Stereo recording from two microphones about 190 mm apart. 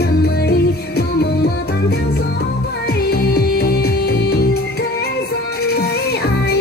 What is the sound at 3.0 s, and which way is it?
Music, 55° left (ahead or behind).